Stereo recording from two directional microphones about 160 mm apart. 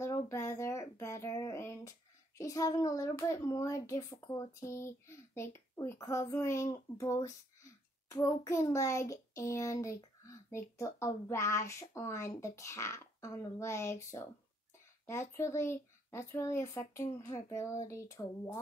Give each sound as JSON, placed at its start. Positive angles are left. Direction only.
{"t": 0.0, "sound": "speech", "side_deg": 20}